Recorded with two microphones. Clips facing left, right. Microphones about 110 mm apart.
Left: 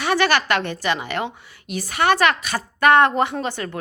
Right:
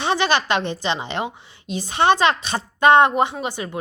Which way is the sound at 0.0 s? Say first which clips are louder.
Left 1 dB; 20° right (ahead or behind).